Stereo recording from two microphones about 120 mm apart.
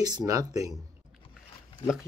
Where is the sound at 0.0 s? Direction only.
30° right (ahead or behind).